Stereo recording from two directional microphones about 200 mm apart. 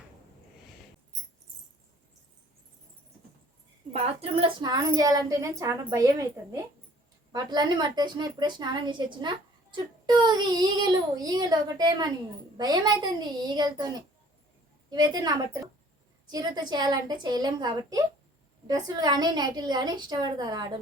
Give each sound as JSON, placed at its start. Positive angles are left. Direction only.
{"t": 3.9, "sound": "a woman's voice", "side_deg": -30}
{"t": 14.8, "sound": "speech", "side_deg": -20}